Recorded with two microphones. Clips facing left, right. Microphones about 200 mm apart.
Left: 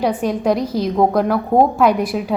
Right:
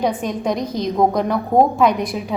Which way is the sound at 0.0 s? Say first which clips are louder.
Left 3 dB; 10° left (ahead or behind).